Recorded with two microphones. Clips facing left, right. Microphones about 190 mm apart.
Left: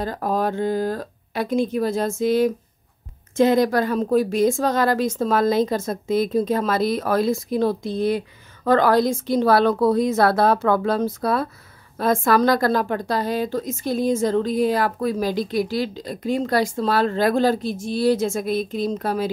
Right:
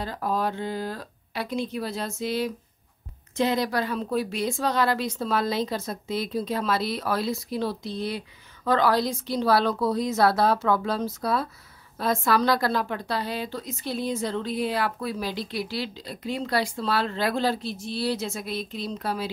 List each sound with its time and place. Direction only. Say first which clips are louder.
0.0 s a woman's voice: left 5 dB; 45° left (ahead or behind)